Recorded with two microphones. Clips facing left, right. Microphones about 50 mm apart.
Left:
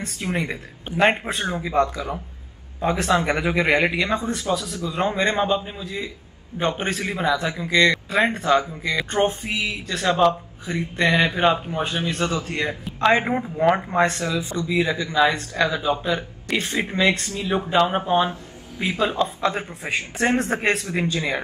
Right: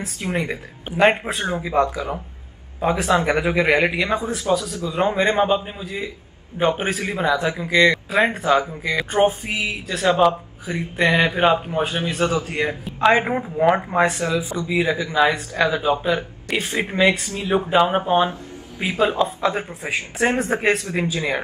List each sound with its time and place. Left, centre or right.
0.0 s a man's voice: centre
16.7 s speech: right
17.0 s speech: centre
19.2 s a man's voice: centre